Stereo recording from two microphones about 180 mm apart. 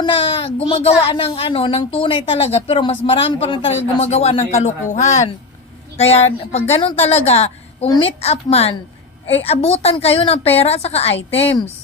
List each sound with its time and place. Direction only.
0.0 s a woman's voice: 30° left (ahead or behind)